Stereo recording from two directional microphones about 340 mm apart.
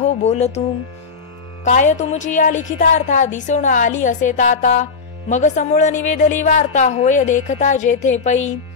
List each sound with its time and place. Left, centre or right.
0.0 s speech: centre
1.6 s a woman's voice: left